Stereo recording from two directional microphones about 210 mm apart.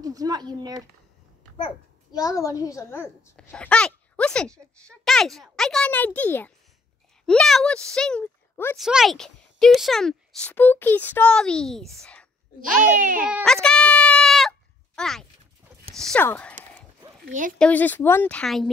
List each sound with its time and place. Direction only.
0.0 s speech: 15° right (ahead or behind)
2.1 s a child's voice: 15° left (ahead or behind)
8.7 s speech: centre (ahead or behind)
12.9 s a child's voice: 40° right (ahead or behind)
13.3 s sheep: 5° left (ahead or behind)
15.0 s speech: centre (ahead or behind)
17.3 s a child's voice: 40° right (ahead or behind)
17.6 s a child's voice: 5° left (ahead or behind)